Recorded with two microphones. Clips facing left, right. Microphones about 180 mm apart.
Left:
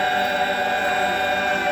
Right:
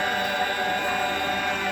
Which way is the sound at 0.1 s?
65° left (ahead or behind).